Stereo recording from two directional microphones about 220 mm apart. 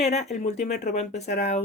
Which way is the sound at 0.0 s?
30° left (ahead or behind).